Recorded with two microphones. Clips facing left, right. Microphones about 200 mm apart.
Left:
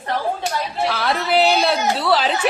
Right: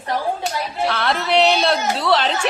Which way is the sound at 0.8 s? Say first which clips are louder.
Right 1 dB; centre (ahead or behind).